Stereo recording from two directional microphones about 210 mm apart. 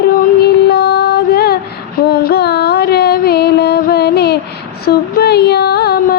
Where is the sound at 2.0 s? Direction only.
50° left (ahead or behind).